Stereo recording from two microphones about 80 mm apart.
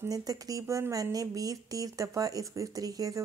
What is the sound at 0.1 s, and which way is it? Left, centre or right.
Speech, right.